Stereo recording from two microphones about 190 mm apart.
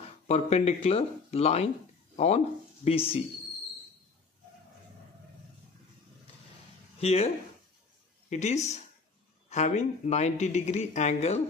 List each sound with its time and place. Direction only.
0.3 s speech: 35° left (ahead or behind)
7.0 s speech: 30° left (ahead or behind)
8.3 s speech: 35° left (ahead or behind)